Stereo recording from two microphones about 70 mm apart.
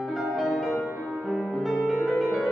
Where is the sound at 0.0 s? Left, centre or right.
Centre.